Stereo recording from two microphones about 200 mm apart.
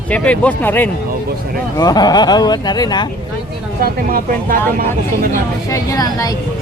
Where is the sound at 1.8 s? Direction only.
20° left (ahead or behind).